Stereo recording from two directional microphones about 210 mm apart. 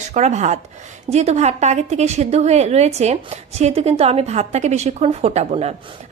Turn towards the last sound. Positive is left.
turn(degrees=-30)  # may be behind; listen again after turning